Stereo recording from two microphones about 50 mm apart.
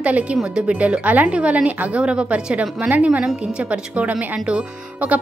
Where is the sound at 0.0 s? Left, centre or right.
Right.